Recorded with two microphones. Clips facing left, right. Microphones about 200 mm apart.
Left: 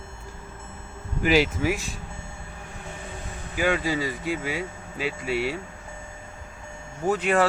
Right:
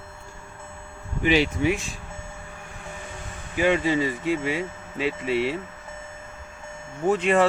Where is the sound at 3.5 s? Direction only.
5° left (ahead or behind).